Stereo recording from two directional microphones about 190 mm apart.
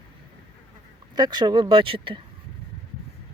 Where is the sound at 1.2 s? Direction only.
20° right (ahead or behind).